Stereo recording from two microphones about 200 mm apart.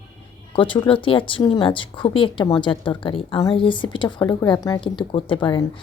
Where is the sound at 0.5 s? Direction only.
25° left (ahead or behind).